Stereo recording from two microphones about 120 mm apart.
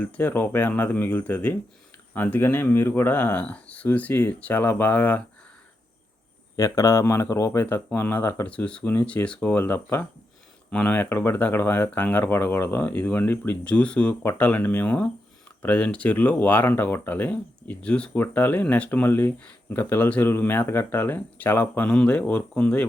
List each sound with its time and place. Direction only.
0.0 s speech: 15° left (ahead or behind)
6.6 s speech: 25° left (ahead or behind); by 22.9 s 10° left (ahead or behind)